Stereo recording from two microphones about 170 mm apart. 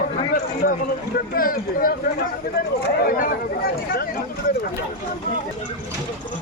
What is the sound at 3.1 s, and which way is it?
Speech, 55° left (ahead or behind).